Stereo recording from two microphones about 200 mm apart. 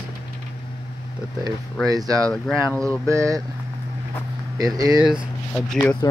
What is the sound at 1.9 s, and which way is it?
Speech, 20° right (ahead or behind).